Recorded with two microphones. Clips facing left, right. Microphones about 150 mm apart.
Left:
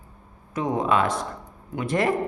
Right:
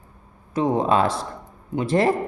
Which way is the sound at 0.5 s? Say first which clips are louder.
Right 3 dB; 30° right (ahead or behind).